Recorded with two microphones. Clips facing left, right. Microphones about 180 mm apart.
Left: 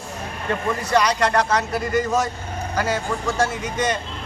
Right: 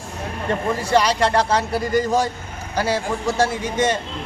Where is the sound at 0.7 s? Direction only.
30° right (ahead or behind).